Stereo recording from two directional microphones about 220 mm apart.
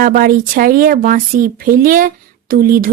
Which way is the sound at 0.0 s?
40° right (ahead or behind).